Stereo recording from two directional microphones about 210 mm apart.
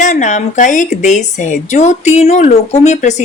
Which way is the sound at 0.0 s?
35° left (ahead or behind).